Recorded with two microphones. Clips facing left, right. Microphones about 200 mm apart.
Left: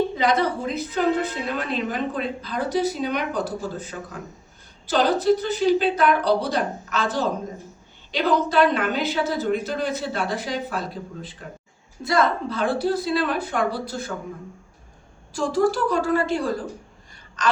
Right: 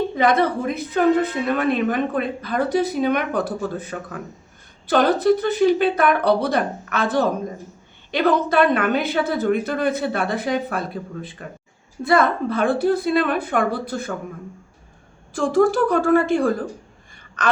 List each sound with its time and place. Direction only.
0.2 s a woman's voice: 55° right (ahead or behind)
15.3 s a woman's voice: 55° right (ahead or behind)